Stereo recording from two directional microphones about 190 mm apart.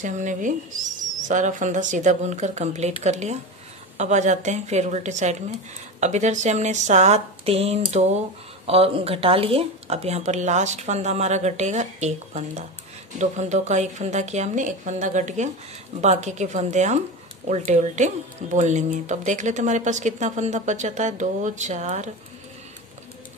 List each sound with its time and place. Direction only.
0.0 s speech: 40° right (ahead or behind)